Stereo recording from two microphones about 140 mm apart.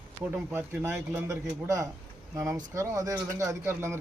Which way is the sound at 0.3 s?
10° right (ahead or behind).